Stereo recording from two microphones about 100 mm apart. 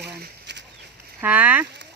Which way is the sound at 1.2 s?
15° right (ahead or behind).